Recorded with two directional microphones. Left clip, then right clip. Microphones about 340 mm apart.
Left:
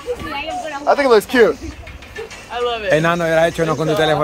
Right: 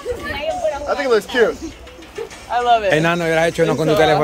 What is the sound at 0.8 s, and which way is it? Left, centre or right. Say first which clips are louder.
Speech: left 7 dB; centre.